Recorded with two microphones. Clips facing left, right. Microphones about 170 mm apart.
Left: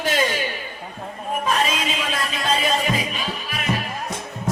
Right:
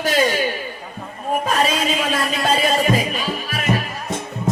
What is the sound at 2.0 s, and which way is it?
Music, 45° right (ahead or behind).